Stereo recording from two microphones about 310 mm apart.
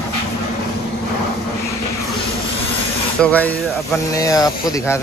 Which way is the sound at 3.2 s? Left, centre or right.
Centre.